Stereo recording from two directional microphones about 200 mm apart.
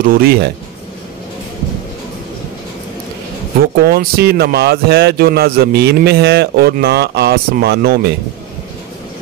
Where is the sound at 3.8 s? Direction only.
50° right (ahead or behind).